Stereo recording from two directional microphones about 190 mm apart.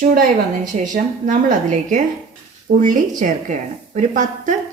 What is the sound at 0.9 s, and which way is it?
A woman's voice, 40° right (ahead or behind).